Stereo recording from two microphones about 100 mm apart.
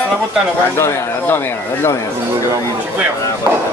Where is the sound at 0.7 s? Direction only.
25° left (ahead or behind).